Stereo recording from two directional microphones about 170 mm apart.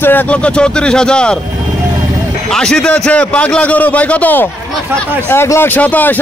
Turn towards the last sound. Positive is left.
turn(degrees=10)  # may be behind; listen again after turning